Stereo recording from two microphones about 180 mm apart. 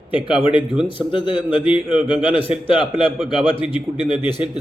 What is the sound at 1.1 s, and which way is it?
Speech, 25° left (ahead or behind).